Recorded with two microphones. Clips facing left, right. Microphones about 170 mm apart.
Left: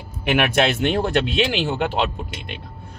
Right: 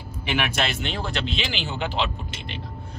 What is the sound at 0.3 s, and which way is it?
Speech, 55° left (ahead or behind).